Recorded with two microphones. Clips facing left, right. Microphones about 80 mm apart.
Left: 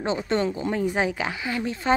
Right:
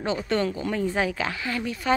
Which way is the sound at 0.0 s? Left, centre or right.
Left.